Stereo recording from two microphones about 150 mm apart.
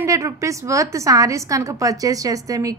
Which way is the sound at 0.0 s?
20° right (ahead or behind).